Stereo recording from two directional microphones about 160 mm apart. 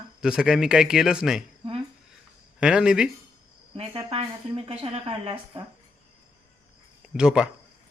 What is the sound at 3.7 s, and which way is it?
Speech, 35° right (ahead or behind).